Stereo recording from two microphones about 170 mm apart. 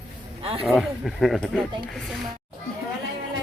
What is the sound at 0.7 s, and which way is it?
Speech, centre (ahead or behind).